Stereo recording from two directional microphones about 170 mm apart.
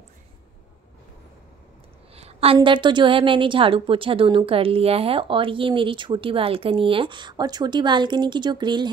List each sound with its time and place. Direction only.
2.1 s a woman's voice: 35° right (ahead or behind)